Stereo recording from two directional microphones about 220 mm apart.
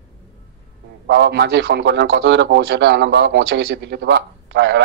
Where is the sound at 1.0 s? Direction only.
50° right (ahead or behind).